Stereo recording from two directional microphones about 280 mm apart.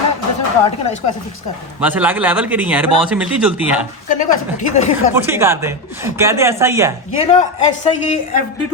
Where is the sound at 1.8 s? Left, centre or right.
Centre.